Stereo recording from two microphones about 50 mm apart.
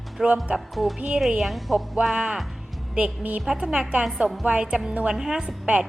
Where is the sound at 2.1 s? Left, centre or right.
Centre.